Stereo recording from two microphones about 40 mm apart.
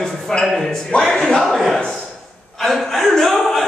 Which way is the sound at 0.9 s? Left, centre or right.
Left.